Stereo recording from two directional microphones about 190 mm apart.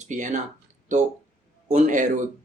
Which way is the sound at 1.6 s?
40° right (ahead or behind).